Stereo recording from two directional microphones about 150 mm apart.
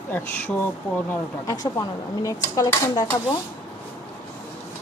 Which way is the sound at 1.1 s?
25° left (ahead or behind).